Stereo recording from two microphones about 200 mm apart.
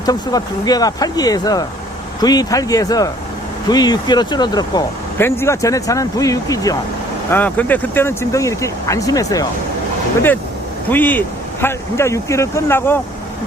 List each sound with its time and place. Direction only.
0.0 s speech: 20° left (ahead or behind)
10.8 s speech: 10° left (ahead or behind)